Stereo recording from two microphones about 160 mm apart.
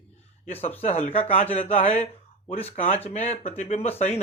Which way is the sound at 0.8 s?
45° left (ahead or behind).